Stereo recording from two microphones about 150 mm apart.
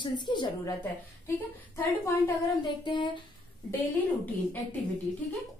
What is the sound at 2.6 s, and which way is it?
Speech, 30° left (ahead or behind).